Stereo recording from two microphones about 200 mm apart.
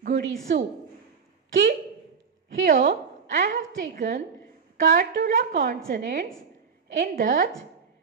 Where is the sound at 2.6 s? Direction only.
50° right (ahead or behind).